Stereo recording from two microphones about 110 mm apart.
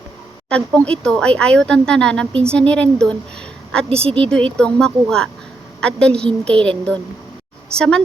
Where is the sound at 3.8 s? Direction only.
60° right (ahead or behind).